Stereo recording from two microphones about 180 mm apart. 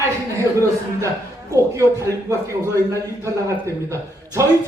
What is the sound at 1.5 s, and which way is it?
A man's voice, 15° right (ahead or behind).